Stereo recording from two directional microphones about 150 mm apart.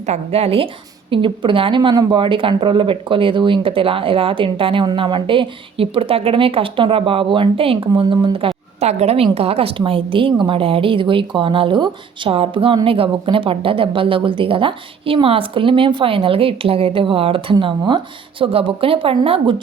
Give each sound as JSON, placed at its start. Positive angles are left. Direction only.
{"t": 0.1, "sound": "speech", "side_deg": -40}